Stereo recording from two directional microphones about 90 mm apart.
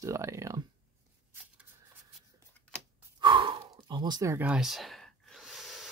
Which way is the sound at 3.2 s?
65° right (ahead or behind).